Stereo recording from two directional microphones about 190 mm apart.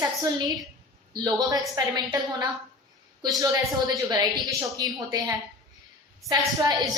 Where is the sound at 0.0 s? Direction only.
20° right (ahead or behind).